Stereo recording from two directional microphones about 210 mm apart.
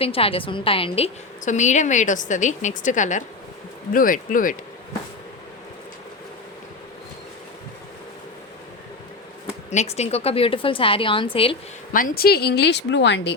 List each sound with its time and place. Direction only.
0.0 s a woman's voice: 25° left (ahead or behind)
9.6 s a woman's voice: 30° left (ahead or behind)
11.9 s a woman's voice: 40° left (ahead or behind); by 13.3 s 55° left (ahead or behind)